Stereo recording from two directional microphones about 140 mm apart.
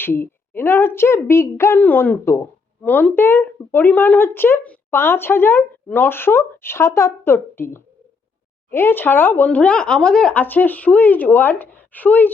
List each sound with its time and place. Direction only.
0.0 s speech: 15° left (ahead or behind)